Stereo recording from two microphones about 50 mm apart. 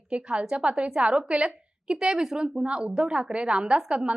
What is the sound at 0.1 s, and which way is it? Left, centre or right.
A woman's voice, right.